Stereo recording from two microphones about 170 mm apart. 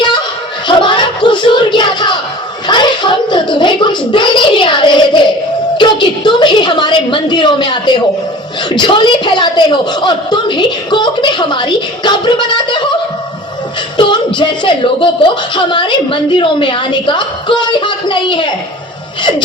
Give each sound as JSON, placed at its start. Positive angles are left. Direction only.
{"t": 0.7, "sound": "a sound", "side_deg": 30}
{"t": 5.7, "sound": "a woman's voice", "side_deg": 25}
{"t": 13.9, "sound": "music", "side_deg": 25}
{"t": 14.3, "sound": "a woman's voice", "side_deg": 30}